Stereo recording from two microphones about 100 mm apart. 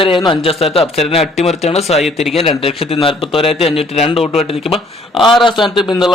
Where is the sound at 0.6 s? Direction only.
80° left.